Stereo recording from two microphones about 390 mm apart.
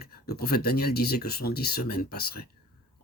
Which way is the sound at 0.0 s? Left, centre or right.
Left.